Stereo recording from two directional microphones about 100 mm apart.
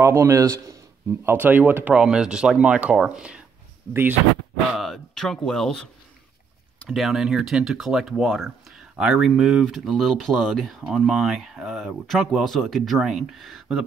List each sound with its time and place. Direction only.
0.0 s a man's voice: 30° right (ahead or behind)
1.2 s speech: 20° right (ahead or behind)
3.9 s speech: 20° right (ahead or behind)
4.7 s speech: centre (ahead or behind)